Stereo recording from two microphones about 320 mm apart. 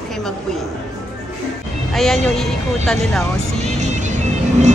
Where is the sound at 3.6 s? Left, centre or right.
Right.